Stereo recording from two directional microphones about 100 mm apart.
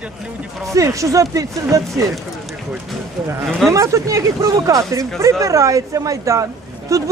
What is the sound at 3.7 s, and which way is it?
Speech, 30° right (ahead or behind).